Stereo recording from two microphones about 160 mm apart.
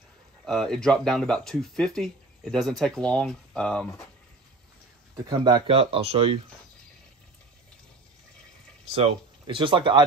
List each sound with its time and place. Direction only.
0.5 s speech: centre (ahead or behind)
5.1 s speech: 25° right (ahead or behind)
8.9 s speech: 35° right (ahead or behind)